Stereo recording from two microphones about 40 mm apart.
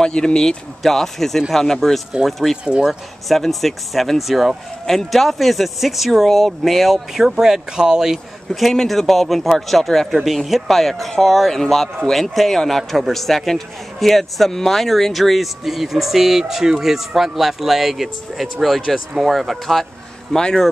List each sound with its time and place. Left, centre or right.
0.0 s speech: centre
0.8 s speech: centre
2.5 s speech: centre
2.9 s a man's voice: centre
4.8 s a man's voice: centre
8.5 s a man's voice: centre
20.3 s speech: centre